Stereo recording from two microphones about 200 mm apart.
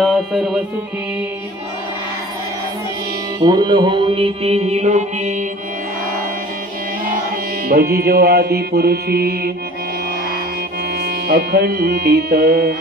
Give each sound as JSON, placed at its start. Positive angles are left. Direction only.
{"t": 0.0, "sound": "music", "side_deg": 0}
{"t": 3.4, "sound": "mantra", "side_deg": -20}
{"t": 7.6, "sound": "mantra", "side_deg": -50}
{"t": 11.0, "sound": "mantra", "side_deg": -50}